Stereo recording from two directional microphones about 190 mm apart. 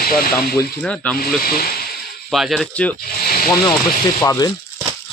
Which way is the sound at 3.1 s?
50° left (ahead or behind).